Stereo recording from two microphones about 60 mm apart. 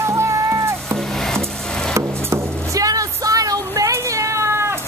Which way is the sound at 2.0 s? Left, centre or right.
Right.